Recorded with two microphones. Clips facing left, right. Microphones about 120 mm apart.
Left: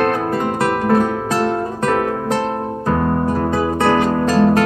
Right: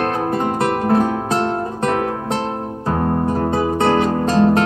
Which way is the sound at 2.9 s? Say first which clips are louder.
Left 1 dB; 35° right (ahead or behind).